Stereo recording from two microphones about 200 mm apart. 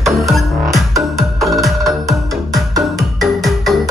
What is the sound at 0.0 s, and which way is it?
Music, centre (ahead or behind).